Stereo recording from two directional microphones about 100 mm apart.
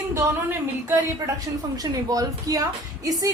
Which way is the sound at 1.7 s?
40° right (ahead or behind).